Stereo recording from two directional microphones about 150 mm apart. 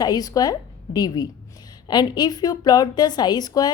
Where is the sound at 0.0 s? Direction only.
25° left (ahead or behind).